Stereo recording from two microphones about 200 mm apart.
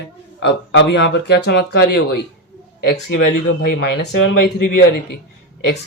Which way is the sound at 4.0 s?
55° left (ahead or behind).